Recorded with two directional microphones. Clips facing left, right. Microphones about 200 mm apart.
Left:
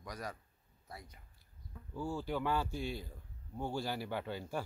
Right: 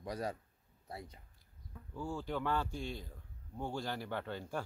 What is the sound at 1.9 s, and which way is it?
A man's voice, 5° left (ahead or behind).